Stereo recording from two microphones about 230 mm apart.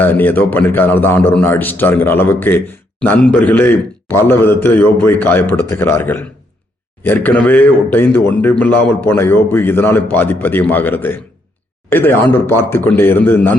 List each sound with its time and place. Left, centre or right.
0.0 s a man's voice: centre